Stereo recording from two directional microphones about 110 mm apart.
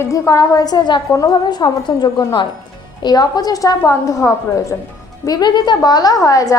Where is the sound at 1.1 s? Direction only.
30° left (ahead or behind).